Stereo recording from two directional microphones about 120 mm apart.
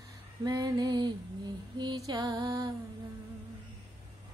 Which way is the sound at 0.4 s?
35° right (ahead or behind).